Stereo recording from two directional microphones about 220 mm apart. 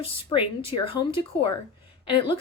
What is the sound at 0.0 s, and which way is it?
A woman's voice, 20° left (ahead or behind).